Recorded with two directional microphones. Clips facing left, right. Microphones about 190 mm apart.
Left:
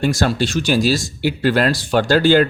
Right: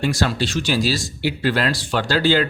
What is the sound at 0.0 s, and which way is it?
Speech, 45° left (ahead or behind).